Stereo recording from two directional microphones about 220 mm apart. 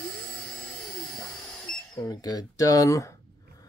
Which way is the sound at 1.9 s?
15° left (ahead or behind).